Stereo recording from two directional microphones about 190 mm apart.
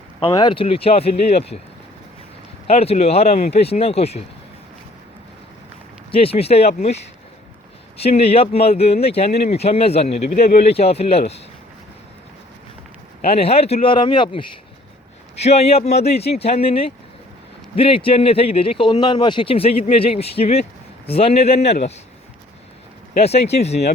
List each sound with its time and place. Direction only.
0.2 s speech: 25° left (ahead or behind)
2.6 s speech: 30° left (ahead or behind)
6.1 s speech: 30° left (ahead or behind)
13.2 s speech: 30° left (ahead or behind)
23.1 s speech: 35° left (ahead or behind)